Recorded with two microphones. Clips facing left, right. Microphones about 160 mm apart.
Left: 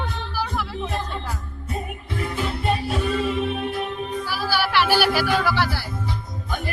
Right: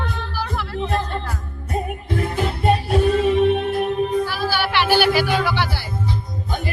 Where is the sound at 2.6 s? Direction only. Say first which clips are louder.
Right 7 dB; 45° right (ahead or behind).